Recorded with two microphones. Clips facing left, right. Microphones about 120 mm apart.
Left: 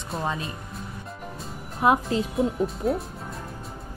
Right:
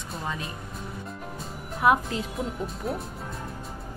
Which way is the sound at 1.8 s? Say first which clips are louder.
Left 1 dB; 25° left (ahead or behind).